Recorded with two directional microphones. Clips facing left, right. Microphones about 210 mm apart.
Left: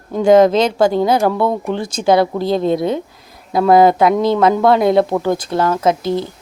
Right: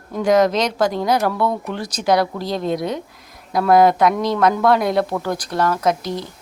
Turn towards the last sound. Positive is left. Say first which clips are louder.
# left 4 dB
turn(degrees=25)  # may be behind; listen again after turning